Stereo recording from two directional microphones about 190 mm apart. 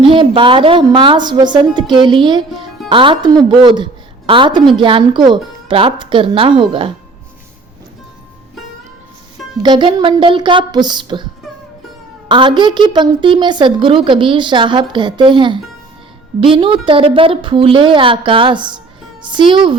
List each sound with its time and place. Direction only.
0.1 s a woman's voice: 25° right (ahead or behind)
9.6 s a woman's voice: 25° right (ahead or behind)
12.3 s a woman's voice: 25° right (ahead or behind)